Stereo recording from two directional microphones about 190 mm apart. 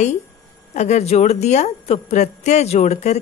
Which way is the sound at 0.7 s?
35° left (ahead or behind).